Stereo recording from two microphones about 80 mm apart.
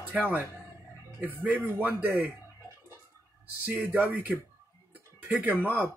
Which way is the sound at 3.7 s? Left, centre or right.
Right.